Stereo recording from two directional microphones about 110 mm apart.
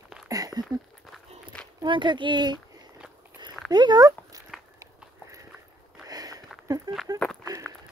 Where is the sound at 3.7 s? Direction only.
40° right (ahead or behind).